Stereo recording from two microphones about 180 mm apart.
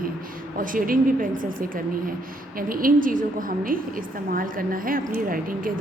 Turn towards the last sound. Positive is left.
turn(degrees=-50)  # may be behind; listen again after turning